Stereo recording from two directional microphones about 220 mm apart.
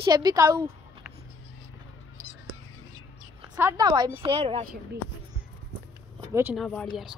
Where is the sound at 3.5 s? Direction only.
15° right (ahead or behind).